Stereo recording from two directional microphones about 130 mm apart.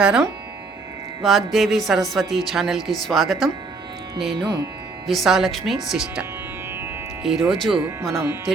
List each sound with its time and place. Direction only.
0.0 s a woman's voice: 5° right (ahead or behind)
7.3 s a woman's voice: centre (ahead or behind)
8.1 s speech: 20° right (ahead or behind)